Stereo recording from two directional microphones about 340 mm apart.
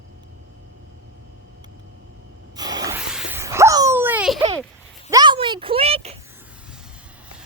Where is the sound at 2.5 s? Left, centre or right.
Centre.